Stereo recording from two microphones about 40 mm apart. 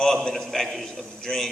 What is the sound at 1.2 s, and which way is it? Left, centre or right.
Speech, centre.